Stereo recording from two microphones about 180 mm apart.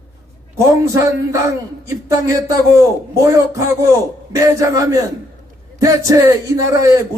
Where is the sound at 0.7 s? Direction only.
20° right (ahead or behind).